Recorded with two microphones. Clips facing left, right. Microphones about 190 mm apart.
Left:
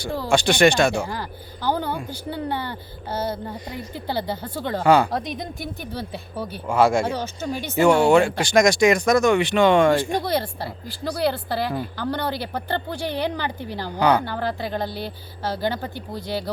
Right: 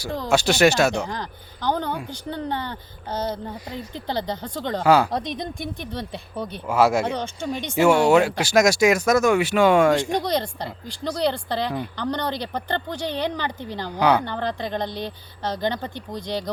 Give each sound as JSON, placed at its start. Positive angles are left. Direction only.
{"t": 0.3, "sound": "speech", "side_deg": -5}
{"t": 0.9, "sound": "speech", "side_deg": 10}
{"t": 6.7, "sound": "speech", "side_deg": -5}
{"t": 7.0, "sound": "speech", "side_deg": 5}
{"t": 7.7, "sound": "speech", "side_deg": -5}
{"t": 9.9, "sound": "speech", "side_deg": 5}
{"t": 14.0, "sound": "speech", "side_deg": -5}
{"t": 14.3, "sound": "speech", "side_deg": 5}